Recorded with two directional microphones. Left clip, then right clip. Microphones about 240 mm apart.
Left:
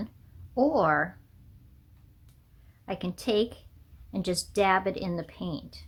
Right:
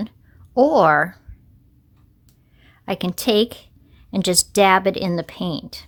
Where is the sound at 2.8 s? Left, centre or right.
Right.